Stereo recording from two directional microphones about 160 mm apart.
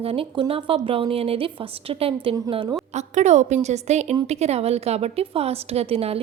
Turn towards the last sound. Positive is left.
turn(degrees=-35)  # may be behind; listen again after turning